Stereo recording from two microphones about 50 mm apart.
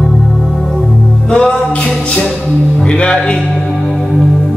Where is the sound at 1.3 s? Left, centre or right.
Centre.